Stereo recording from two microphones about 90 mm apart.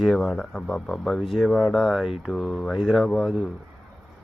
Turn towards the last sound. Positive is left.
turn(degrees=5)  # may be behind; listen again after turning